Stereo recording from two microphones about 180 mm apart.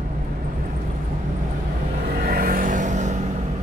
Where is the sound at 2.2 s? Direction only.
55° right (ahead or behind).